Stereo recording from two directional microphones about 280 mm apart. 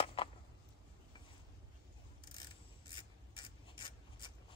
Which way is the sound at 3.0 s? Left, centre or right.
Centre.